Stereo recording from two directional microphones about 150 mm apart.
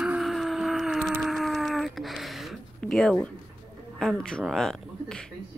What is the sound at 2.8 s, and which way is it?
A woman's voice, centre (ahead or behind).